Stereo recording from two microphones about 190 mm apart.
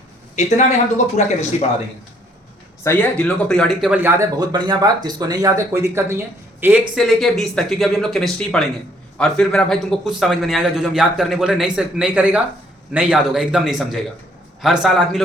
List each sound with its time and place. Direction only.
0.3 s speech: 40° left (ahead or behind)
2.8 s a man's voice: 10° left (ahead or behind); by 6.7 s 10° right (ahead or behind)
6.9 s a man's voice: centre (ahead or behind)